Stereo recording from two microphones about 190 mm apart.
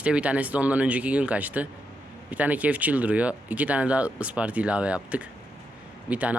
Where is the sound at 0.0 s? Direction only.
5° right (ahead or behind).